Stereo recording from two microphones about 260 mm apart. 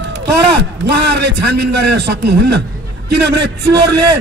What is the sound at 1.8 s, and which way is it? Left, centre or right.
Speech, right.